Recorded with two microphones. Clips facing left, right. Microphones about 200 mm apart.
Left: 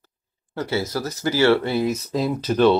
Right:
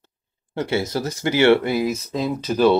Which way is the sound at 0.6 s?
25° right (ahead or behind).